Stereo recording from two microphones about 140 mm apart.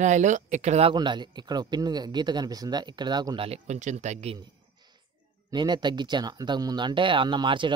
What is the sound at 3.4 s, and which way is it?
Speech, 55° right (ahead or behind).